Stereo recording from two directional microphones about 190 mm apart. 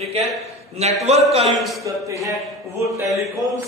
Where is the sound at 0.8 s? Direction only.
35° right (ahead or behind).